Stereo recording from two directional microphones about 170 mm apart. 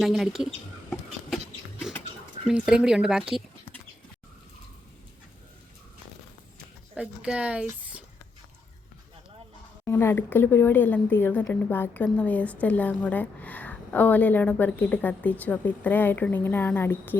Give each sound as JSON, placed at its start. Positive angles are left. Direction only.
{"t": 0.0, "sound": "a sound", "side_deg": 0}
{"t": 2.5, "sound": "speech", "side_deg": -5}
{"t": 6.9, "sound": "speech", "side_deg": -5}
{"t": 9.8, "sound": "a woman's voice", "side_deg": 15}